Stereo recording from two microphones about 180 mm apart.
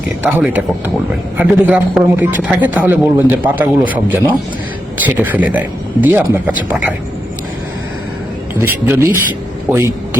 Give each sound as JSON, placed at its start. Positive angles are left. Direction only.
{"t": 0.2, "sound": "a man's voice", "side_deg": -10}
{"t": 8.6, "sound": "a man's voice", "side_deg": -15}